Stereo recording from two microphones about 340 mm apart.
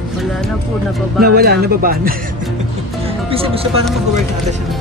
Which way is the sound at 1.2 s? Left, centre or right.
Right.